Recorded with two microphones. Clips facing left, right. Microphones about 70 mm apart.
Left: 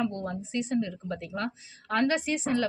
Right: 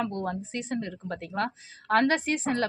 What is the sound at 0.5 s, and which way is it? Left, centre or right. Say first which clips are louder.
Speech: left 3 dB; right.